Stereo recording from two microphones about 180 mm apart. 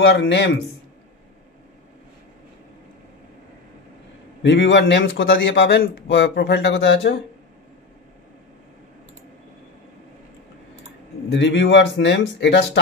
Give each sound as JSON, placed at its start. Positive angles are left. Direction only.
{"t": 0.0, "sound": "speech", "side_deg": 75}
{"t": 4.4, "sound": "a man's voice", "side_deg": 85}
{"t": 11.3, "sound": "a man's voice", "side_deg": 85}